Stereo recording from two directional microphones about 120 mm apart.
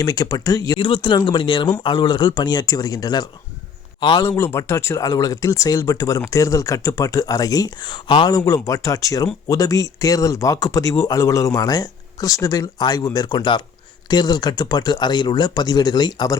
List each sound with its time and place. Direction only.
0.0 s speech: 30° left (ahead or behind)
0.8 s speech: 45° left (ahead or behind)
4.4 s speech: 20° left (ahead or behind)